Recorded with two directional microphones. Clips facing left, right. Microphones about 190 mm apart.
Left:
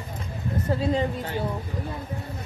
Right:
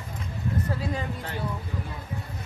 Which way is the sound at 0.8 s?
25° left (ahead or behind).